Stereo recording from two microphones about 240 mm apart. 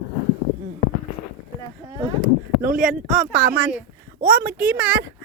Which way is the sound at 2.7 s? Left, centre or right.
Centre.